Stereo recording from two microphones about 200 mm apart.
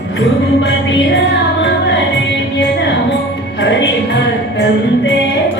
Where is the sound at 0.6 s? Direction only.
60° left (ahead or behind).